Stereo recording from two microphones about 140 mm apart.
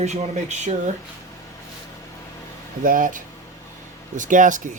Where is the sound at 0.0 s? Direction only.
55° right (ahead or behind).